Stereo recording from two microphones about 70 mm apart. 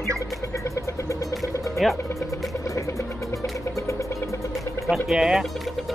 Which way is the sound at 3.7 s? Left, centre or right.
Left.